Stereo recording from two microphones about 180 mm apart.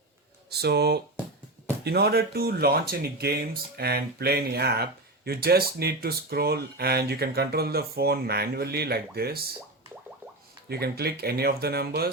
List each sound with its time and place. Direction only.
0.5 s speech: 65° right (ahead or behind)
10.7 s speech: 60° right (ahead or behind)